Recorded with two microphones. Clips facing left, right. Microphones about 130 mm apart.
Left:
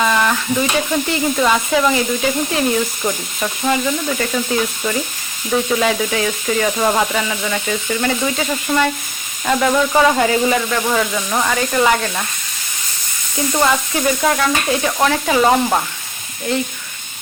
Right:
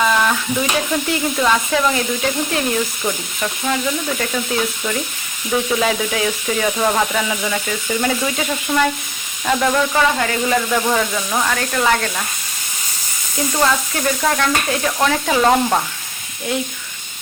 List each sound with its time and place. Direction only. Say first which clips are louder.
0.0 s speech: even; centre (ahead or behind)
9.9 s speech: left 4 dB; 20° left (ahead or behind)
10.7 s speech: even; 5° right (ahead or behind)
13.5 s speech: left 2 dB; 10° left (ahead or behind)